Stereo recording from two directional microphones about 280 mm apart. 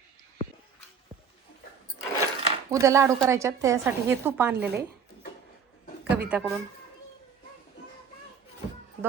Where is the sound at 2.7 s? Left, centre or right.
Centre.